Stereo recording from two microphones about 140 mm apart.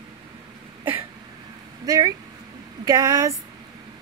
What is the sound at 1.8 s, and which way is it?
Speech, 25° right (ahead or behind).